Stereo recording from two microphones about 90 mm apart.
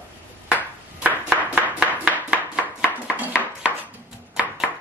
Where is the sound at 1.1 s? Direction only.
20° left (ahead or behind).